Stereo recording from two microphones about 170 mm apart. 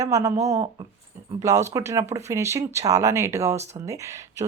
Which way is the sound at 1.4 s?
15° right (ahead or behind).